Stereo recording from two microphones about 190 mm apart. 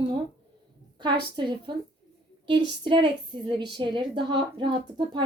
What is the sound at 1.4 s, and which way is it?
A woman's voice, 25° right (ahead or behind).